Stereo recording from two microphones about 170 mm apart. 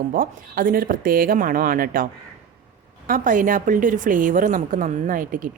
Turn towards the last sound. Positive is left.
turn(degrees=-50)  # may be behind; listen again after turning